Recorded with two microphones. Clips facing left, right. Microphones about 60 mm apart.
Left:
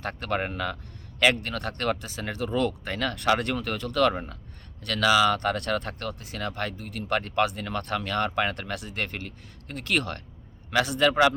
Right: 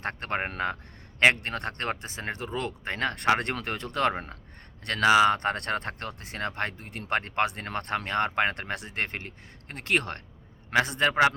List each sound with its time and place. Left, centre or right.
0.0 s speech: right